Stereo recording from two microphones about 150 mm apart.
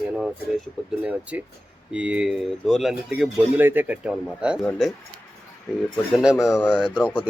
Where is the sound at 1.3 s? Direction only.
10° right (ahead or behind).